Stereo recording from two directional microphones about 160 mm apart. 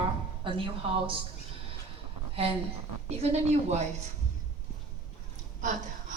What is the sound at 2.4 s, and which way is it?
A woman's voice, 35° right (ahead or behind).